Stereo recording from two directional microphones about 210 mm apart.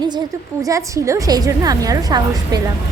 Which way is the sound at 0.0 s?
20° right (ahead or behind).